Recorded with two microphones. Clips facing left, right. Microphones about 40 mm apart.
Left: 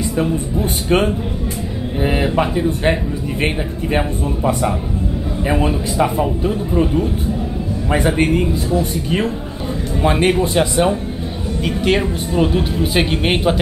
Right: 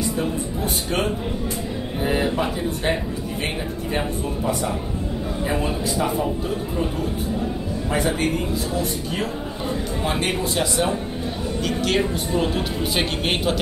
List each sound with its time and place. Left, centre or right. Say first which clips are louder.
0.8 s speech: left 9 dB; left
4.5 s speech: left 7 dB; left
6.2 s speech: left 5 dB; left
7.9 s speech: left 6 dB; left
10.0 s speech: left 10 dB; centre